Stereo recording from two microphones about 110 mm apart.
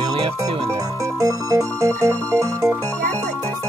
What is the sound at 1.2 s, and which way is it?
Music, 30° right (ahead or behind).